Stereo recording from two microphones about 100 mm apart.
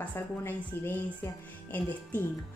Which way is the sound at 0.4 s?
20° left (ahead or behind).